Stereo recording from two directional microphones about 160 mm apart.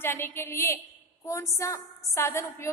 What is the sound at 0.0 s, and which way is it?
A woman's voice, 15° left (ahead or behind).